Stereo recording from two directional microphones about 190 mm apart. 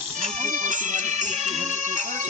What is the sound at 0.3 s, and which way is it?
Music, 40° right (ahead or behind).